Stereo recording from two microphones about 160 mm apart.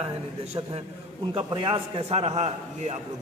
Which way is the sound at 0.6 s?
30° right (ahead or behind).